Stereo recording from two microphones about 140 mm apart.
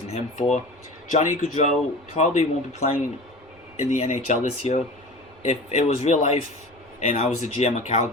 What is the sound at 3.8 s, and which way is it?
Speech, 55° left (ahead or behind).